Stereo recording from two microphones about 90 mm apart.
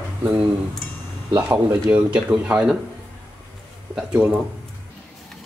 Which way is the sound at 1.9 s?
15° right (ahead or behind).